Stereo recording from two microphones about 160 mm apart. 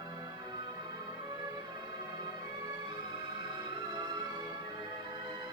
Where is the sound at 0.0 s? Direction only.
25° right (ahead or behind).